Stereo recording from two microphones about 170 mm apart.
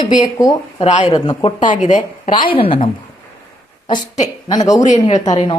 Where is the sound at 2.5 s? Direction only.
30° left (ahead or behind).